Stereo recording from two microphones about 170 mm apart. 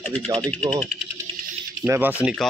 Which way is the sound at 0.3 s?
35° right (ahead or behind).